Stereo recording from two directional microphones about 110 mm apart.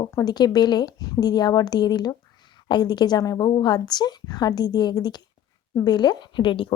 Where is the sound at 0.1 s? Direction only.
35° left (ahead or behind).